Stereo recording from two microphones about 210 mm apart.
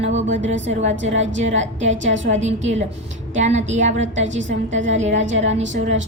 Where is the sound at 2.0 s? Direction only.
60° right (ahead or behind).